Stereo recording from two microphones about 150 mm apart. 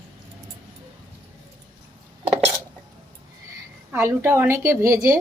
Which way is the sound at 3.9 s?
15° right (ahead or behind).